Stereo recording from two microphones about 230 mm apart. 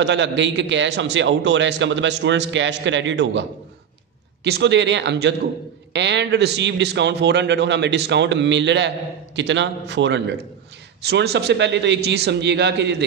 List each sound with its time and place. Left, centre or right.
0.0 s a man's voice: right
4.5 s a man's voice: right